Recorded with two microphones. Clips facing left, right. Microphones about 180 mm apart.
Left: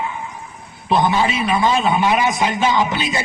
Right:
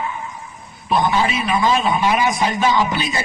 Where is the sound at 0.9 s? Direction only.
25° left (ahead or behind).